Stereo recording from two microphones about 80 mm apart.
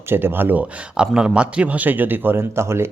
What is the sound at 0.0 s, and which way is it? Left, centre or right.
Speech, right.